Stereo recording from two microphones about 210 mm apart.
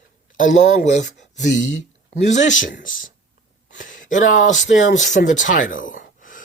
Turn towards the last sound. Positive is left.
turn(degrees=40)  # may be behind; listen again after turning